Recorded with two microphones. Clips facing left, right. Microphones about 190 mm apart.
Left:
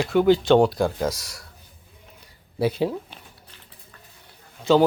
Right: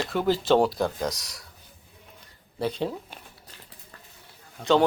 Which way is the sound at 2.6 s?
5° left (ahead or behind).